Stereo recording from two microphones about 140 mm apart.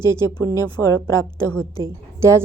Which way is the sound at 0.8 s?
25° left (ahead or behind).